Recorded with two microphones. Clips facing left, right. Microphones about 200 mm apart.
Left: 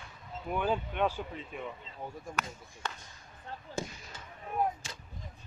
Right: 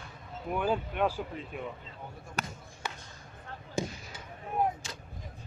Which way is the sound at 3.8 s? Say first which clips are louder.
Right 4 dB; 15° right (ahead or behind).